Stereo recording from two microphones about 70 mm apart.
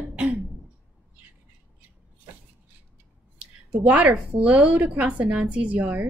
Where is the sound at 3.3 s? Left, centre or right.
Centre.